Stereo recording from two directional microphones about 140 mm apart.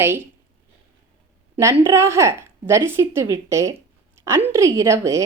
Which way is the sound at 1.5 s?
20° right (ahead or behind).